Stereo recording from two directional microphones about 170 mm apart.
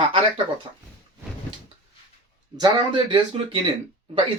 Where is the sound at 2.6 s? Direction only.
25° right (ahead or behind).